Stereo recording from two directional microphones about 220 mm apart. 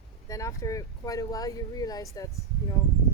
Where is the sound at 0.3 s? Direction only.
15° left (ahead or behind).